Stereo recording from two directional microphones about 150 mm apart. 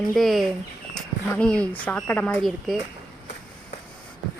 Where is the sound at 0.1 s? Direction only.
Centre (ahead or behind).